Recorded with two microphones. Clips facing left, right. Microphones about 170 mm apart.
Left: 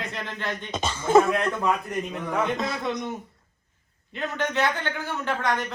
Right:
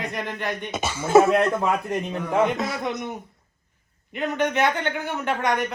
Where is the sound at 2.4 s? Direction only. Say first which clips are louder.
Right 3 dB; 15° right (ahead or behind).